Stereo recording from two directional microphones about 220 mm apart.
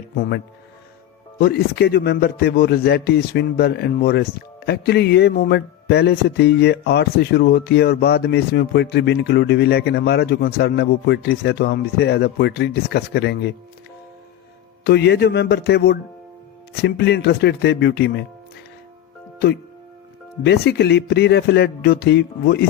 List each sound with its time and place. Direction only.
1.4 s a man's voice: 45° left (ahead or behind)
14.8 s a man's voice: 50° left (ahead or behind)
20.4 s a man's voice: 50° left (ahead or behind)